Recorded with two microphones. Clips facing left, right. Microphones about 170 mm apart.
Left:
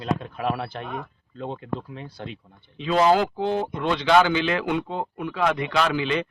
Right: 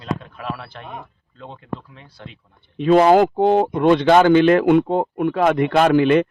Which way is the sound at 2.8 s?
50° right (ahead or behind).